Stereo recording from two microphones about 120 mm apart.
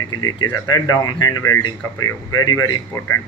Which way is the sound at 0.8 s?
30° left (ahead or behind).